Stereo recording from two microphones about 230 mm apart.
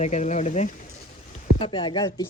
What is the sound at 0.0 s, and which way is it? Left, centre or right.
Speech, left.